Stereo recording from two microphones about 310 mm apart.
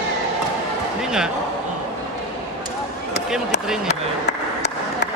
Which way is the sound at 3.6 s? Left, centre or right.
Centre.